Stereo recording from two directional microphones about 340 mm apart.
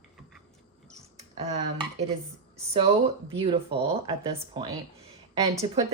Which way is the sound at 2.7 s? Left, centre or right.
Centre.